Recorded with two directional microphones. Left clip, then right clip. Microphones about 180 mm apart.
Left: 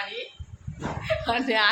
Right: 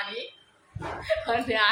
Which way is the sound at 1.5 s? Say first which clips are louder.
Left 1 dB; 40° left (ahead or behind).